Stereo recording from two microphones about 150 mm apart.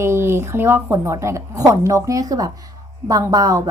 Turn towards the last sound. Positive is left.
turn(degrees=-25)  # may be behind; listen again after turning